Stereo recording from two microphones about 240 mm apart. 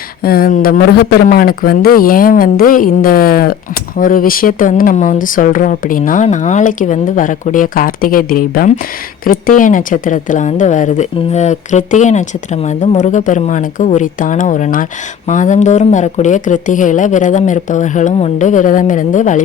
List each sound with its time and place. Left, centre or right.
0.2 s speech: left